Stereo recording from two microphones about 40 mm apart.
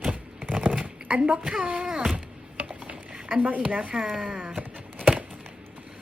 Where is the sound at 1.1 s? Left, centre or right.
Right.